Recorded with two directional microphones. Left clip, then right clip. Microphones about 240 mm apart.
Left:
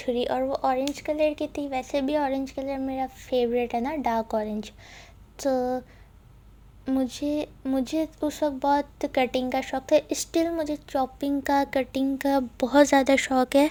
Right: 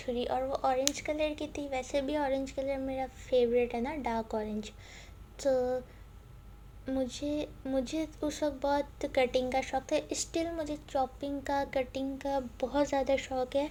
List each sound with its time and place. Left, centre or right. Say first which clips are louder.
0.0 s speech: left 7 dB; left
6.8 s speech: left 7 dB; left